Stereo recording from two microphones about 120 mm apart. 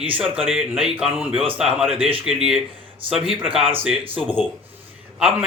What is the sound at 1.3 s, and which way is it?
Speech, 50° right (ahead or behind).